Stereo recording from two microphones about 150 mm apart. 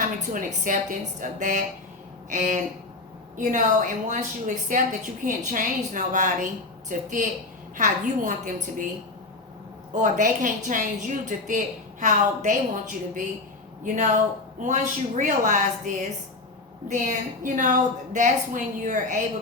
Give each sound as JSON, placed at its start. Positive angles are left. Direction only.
{"t": 0.0, "sound": "a woman's voice", "side_deg": -60}
{"t": 9.9, "sound": "a woman's voice", "side_deg": -60}